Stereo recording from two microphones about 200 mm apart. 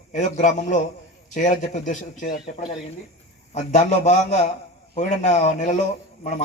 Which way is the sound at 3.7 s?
35° left (ahead or behind).